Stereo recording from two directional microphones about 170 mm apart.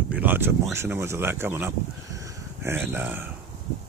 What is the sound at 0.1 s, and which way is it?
Speech, 10° right (ahead or behind).